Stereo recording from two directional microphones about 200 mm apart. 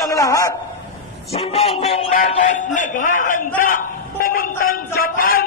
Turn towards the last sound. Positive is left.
turn(degrees=45)  # may be behind; listen again after turning